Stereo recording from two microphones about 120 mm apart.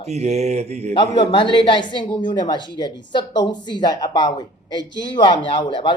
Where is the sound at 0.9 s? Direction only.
40° left (ahead or behind).